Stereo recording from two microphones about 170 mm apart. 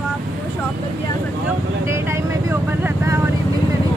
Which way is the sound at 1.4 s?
15° right (ahead or behind).